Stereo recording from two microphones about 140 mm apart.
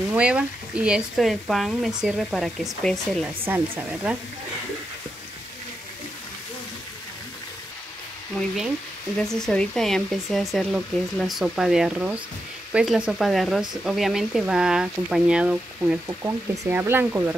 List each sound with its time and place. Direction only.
0.1 s speech: 10° right (ahead or behind)
3.3 s speech: 15° right (ahead or behind)
9.4 s speech: 5° left (ahead or behind)
16.1 s speech: 20° right (ahead or behind)